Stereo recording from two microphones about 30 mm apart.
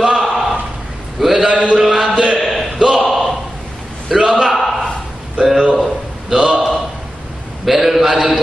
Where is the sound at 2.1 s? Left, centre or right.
Right.